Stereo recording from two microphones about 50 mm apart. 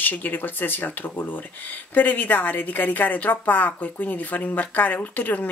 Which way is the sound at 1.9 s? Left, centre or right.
Left.